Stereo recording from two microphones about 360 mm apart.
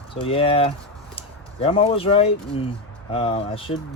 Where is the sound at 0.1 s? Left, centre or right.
Centre.